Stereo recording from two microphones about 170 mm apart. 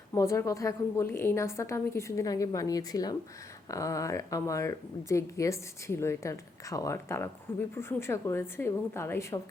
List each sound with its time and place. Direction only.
0.1 s speech: 15° left (ahead or behind)